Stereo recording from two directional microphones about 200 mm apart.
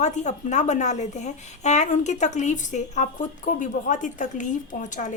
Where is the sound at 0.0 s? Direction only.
35° left (ahead or behind).